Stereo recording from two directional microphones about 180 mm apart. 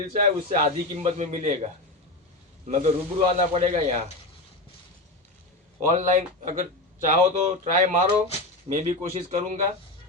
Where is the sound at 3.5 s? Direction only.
40° right (ahead or behind).